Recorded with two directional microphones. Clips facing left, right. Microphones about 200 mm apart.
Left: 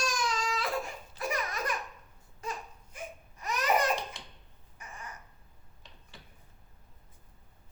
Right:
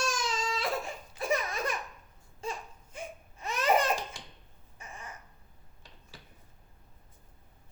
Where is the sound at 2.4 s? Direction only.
25° right (ahead or behind).